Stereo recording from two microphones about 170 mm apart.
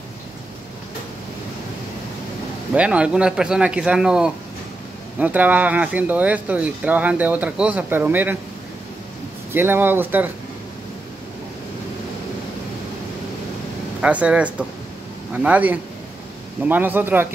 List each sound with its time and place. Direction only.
2.7 s a man's voice: 5° right (ahead or behind)
9.5 s speech: 15° right (ahead or behind)
14.0 s speech: 5° right (ahead or behind)